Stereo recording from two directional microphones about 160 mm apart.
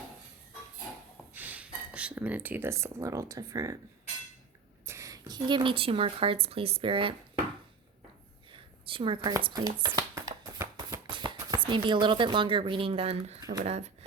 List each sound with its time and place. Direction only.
1.3 s speech: 10° right (ahead or behind)
4.9 s speech: 20° right (ahead or behind)
8.5 s a sound: 35° right (ahead or behind)
9.4 s speech: 25° right (ahead or behind)
9.8 s a sound: 25° right (ahead or behind)
11.1 s speech: 30° right (ahead or behind)